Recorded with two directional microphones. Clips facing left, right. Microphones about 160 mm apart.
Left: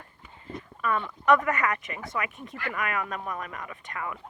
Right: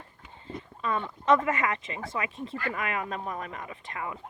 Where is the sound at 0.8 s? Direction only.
25° right (ahead or behind).